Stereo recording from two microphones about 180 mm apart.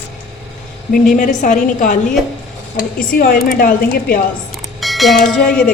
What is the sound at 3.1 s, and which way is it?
A woman's voice, 55° left (ahead or behind).